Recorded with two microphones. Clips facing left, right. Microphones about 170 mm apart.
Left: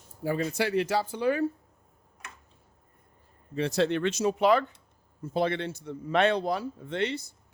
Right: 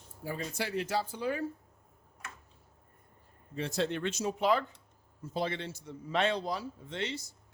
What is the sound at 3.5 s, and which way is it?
A man's voice, 80° left.